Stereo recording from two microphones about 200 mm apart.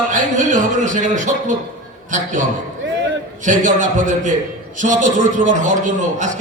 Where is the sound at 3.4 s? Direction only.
40° right (ahead or behind).